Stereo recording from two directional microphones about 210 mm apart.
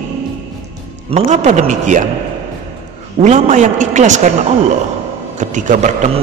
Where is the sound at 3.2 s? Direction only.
35° right (ahead or behind).